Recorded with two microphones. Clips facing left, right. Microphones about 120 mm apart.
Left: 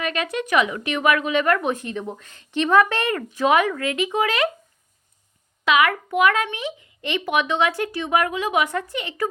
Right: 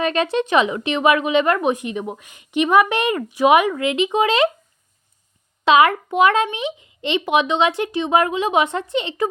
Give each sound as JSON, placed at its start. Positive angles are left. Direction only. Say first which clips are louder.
{"t": 0.0, "sound": "a woman's voice", "louder": "right 6 dB", "side_deg": -30}
{"t": 5.6, "sound": "a woman's voice", "louder": "right 5 dB", "side_deg": -30}